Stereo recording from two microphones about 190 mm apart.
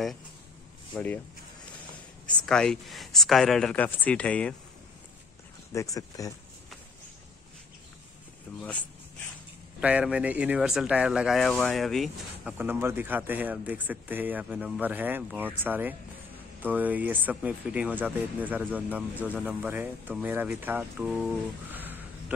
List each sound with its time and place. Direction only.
0.9 s speech: 10° left (ahead or behind)
2.2 s speech: 5° left (ahead or behind)
5.7 s speech: 15° left (ahead or behind)
8.5 s speech: 5° left (ahead or behind)
9.8 s speech: 5° right (ahead or behind)
12.5 s speech: 10° right (ahead or behind)